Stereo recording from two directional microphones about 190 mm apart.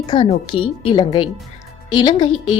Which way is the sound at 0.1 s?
25° left (ahead or behind).